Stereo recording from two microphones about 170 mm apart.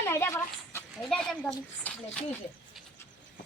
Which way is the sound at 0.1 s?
15° left (ahead or behind).